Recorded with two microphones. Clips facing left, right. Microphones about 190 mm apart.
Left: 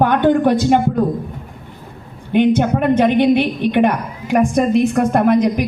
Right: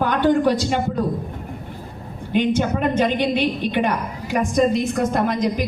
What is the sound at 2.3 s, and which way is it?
A woman's voice, 55° left (ahead or behind).